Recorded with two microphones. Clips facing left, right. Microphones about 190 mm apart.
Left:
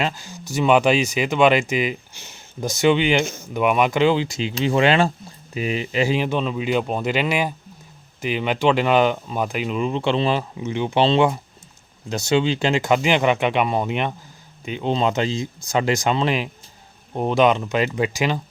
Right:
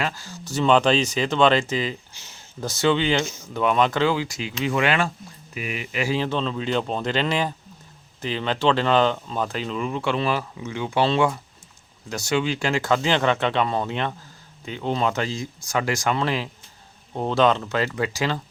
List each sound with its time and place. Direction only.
0.0 s speech: 15° left (ahead or behind)
2.1 s speech: 55° left (ahead or behind)
2.6 s speech: 15° left (ahead or behind)
6.1 s speech: 15° left (ahead or behind)